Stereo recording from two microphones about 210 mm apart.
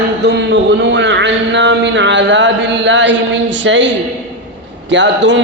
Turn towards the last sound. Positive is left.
turn(degrees=-60)  # may be behind; listen again after turning